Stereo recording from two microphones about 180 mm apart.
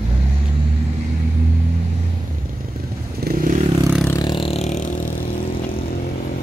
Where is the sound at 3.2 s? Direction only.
55° right (ahead or behind).